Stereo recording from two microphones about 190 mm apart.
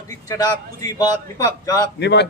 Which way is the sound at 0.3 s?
20° left (ahead or behind).